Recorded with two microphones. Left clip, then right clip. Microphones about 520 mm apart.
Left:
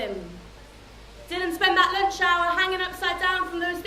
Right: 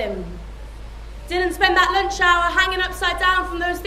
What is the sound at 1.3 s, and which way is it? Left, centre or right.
Speech, right.